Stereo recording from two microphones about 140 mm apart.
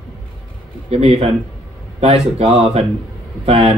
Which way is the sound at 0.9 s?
45° right (ahead or behind).